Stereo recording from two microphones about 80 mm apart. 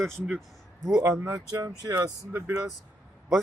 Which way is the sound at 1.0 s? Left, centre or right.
Right.